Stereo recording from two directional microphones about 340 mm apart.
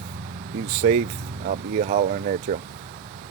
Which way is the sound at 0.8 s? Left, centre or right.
Right.